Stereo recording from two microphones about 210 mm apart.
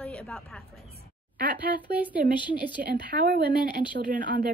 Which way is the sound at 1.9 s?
5° right (ahead or behind).